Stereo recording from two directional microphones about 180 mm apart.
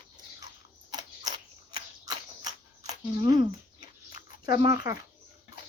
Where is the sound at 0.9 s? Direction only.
20° right (ahead or behind).